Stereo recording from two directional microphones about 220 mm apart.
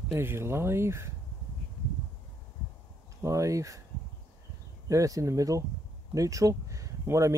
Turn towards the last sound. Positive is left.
turn(degrees=-15)  # may be behind; listen again after turning